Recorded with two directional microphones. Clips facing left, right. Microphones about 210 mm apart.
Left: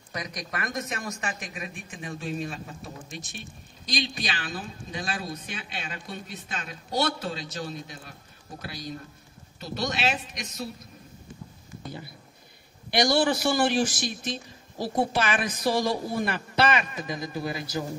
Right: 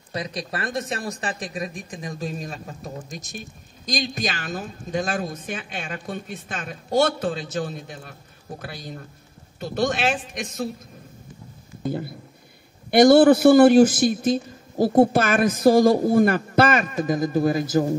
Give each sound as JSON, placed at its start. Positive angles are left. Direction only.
{"t": 0.1, "sound": "speech", "side_deg": -30}
{"t": 12.9, "sound": "speech", "side_deg": -55}